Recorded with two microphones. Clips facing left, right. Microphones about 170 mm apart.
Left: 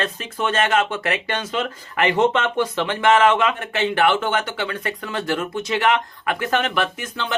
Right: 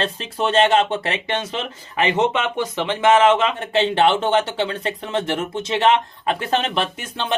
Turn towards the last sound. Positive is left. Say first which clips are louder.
# even
turn(degrees=-30)  # may be behind; listen again after turning